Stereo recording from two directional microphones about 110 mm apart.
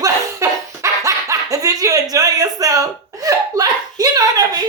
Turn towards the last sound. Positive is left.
turn(degrees=-35)  # may be behind; listen again after turning